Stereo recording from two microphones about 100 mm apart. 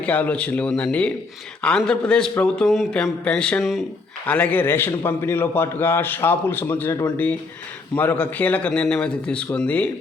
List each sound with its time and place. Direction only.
0.0 s a man's voice: 15° left (ahead or behind)